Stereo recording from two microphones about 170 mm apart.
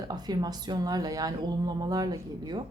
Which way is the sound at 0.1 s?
25° right (ahead or behind).